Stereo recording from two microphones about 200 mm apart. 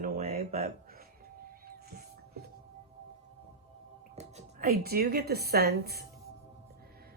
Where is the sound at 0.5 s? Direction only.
50° right (ahead or behind).